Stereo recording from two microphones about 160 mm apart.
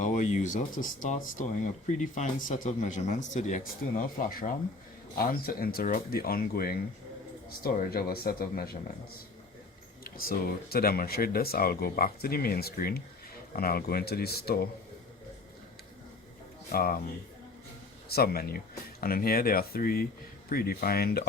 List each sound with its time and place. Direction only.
0.0 s speech: 50° left (ahead or behind); by 8.8 s 70° left (ahead or behind)
10.0 s speech: 65° left (ahead or behind)
16.7 s speech: 65° left (ahead or behind)
18.1 s speech: 70° left (ahead or behind)